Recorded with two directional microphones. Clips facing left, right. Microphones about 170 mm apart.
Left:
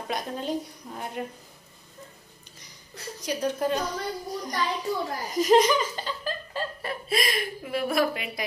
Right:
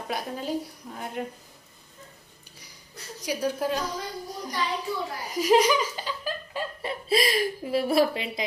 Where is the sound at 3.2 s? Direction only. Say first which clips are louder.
Even; 10° right (ahead or behind).